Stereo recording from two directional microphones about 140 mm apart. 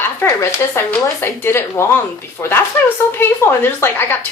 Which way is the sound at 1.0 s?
15° left (ahead or behind).